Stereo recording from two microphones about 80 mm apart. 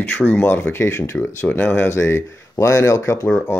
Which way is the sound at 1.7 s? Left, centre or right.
Left.